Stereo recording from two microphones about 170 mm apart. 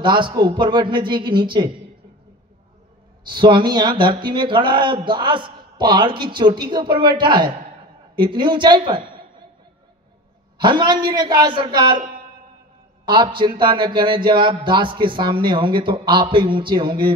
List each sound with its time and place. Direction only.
0.0 s speech: 25° right (ahead or behind)
3.3 s speech: 30° right (ahead or behind)
10.6 s speech: 25° right (ahead or behind)
13.0 s speech: 25° right (ahead or behind)